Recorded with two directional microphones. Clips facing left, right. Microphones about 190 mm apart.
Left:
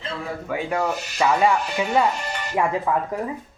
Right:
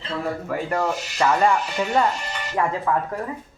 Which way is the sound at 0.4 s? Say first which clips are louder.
Left 2 dB; centre (ahead or behind).